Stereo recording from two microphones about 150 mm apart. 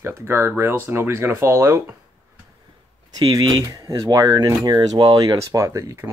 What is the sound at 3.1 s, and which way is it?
Speech, 25° right (ahead or behind).